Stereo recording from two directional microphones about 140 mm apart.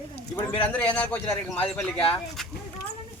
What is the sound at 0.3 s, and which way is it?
Speech, 10° left (ahead or behind).